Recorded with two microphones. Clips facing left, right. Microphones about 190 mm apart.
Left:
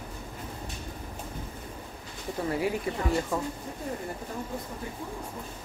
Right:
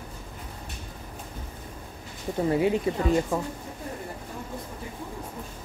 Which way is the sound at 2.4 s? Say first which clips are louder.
Right 6 dB; 25° right (ahead or behind).